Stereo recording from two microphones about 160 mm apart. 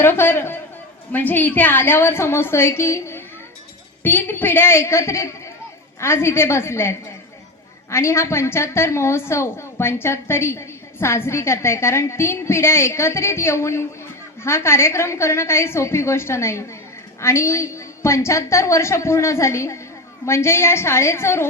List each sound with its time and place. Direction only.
0.0 s a woman's voice: 15° left (ahead or behind)